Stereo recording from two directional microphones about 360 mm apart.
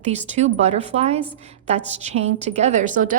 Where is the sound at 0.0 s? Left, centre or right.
Centre.